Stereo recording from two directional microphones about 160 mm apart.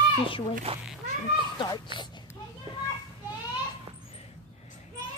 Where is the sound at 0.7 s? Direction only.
35° right (ahead or behind).